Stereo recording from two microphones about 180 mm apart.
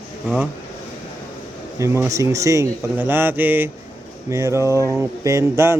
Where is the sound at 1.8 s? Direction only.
15° right (ahead or behind).